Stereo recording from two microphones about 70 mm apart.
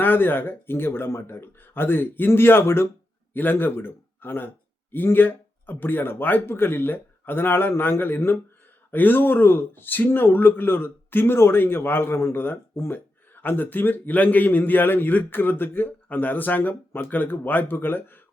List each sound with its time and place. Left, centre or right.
0.0 s a man's voice: left